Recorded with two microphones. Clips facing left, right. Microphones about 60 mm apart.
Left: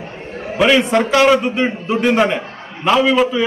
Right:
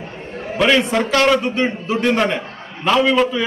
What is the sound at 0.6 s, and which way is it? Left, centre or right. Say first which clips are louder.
A man's voice: left 2 dB; centre.